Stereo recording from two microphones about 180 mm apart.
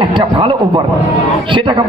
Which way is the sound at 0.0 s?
30° right (ahead or behind).